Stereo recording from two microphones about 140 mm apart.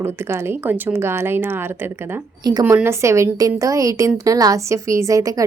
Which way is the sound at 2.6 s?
15° right (ahead or behind).